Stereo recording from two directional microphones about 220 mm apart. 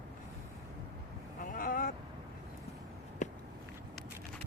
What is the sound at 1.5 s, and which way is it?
Vehicle, 40° left (ahead or behind).